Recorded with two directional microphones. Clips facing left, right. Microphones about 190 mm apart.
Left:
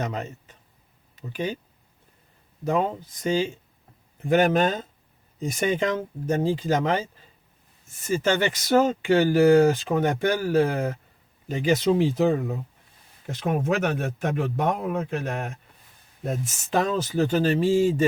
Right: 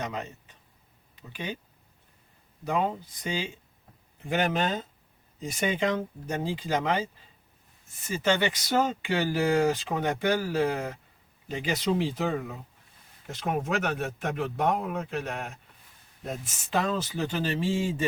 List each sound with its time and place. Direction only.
0.0 s speech: 45° left (ahead or behind)
3.2 s speech: 45° left (ahead or behind)
8.1 s speech: 45° left (ahead or behind)